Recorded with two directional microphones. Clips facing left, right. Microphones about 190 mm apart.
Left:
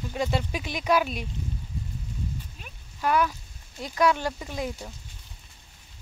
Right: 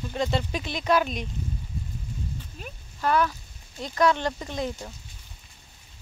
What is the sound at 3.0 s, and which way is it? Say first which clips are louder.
Speech: right 1 dB; 10° left (ahead or behind).